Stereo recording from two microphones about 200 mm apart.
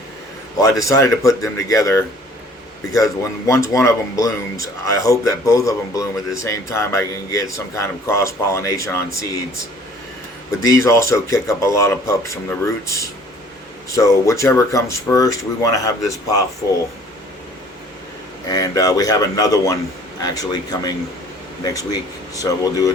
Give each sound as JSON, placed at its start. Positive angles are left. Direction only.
{"t": 0.5, "sound": "speech", "side_deg": 15}
{"t": 10.5, "sound": "speech", "side_deg": 15}
{"t": 18.5, "sound": "speech", "side_deg": 20}